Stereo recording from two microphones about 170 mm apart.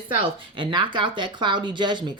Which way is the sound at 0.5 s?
30° right (ahead or behind).